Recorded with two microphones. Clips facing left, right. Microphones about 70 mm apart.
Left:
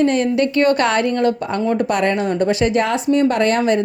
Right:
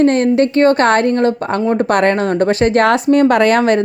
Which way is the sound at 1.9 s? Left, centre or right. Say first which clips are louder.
Right 4 dB; right.